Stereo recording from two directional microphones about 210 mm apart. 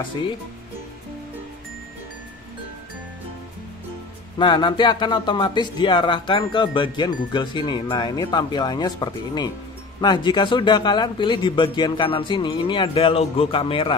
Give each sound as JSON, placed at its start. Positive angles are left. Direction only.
{"t": 4.4, "sound": "speech", "side_deg": 20}